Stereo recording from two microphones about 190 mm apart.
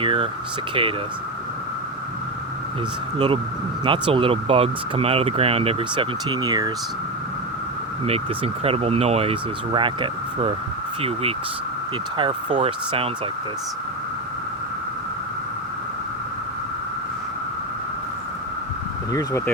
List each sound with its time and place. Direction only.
0.0 s speech: 30° right (ahead or behind)
3.2 s speech: 25° right (ahead or behind)
8.6 s speech: 30° right (ahead or behind)
12.5 s speech: 30° right (ahead or behind)